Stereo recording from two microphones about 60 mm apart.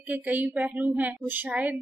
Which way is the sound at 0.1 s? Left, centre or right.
Right.